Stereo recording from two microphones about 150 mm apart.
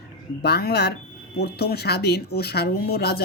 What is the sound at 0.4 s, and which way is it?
Speech, 90° left.